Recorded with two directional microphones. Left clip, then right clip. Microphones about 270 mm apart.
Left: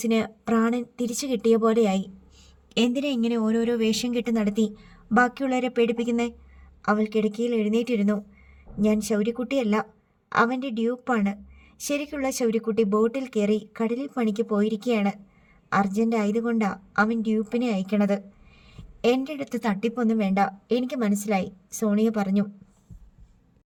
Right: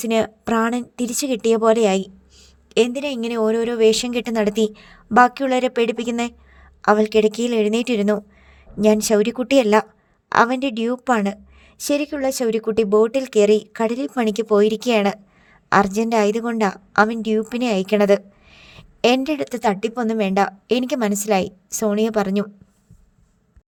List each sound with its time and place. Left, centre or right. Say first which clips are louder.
0.1 s a woman's voice: right 7 dB; right